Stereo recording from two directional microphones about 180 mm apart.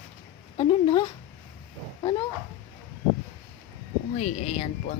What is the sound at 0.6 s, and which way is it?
Speech, 30° left (ahead or behind).